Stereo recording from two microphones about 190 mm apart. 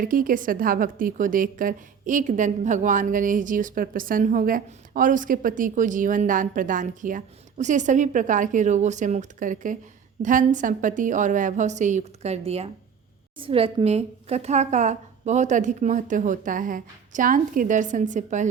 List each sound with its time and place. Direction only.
0.0 s a woman's voice: 45° right (ahead or behind)